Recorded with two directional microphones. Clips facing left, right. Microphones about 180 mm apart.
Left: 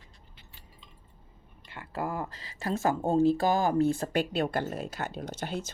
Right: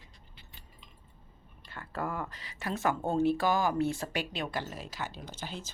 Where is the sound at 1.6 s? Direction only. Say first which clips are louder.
Left 2 dB; 20° left (ahead or behind).